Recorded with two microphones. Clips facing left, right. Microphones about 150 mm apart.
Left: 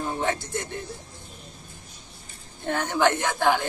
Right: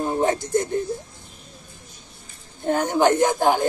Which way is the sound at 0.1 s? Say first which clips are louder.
Right 7 dB; 40° right (ahead or behind).